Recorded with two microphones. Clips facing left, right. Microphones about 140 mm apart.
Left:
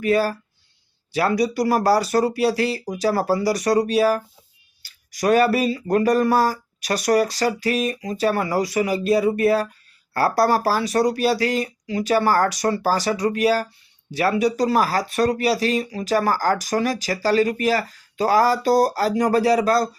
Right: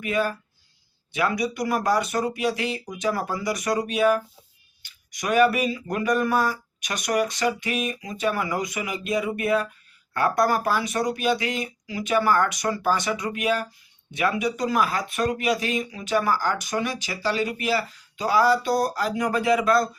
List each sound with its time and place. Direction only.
0.0 s speech: 35° left (ahead or behind)